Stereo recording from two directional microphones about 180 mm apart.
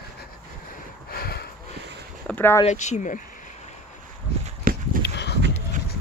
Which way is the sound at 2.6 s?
40° left (ahead or behind).